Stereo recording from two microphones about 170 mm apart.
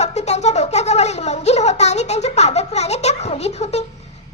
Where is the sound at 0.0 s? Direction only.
40° left (ahead or behind).